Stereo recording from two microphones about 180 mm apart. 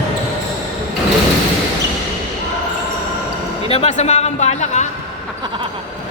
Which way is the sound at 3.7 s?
35° left (ahead or behind).